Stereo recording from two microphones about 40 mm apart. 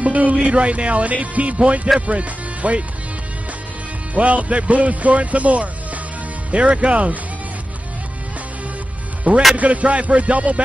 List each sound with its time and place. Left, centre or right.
0.0 s speech: right
4.1 s speech: right
9.3 s speech: right